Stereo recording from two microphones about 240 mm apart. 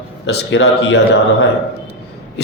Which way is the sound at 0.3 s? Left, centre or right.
Left.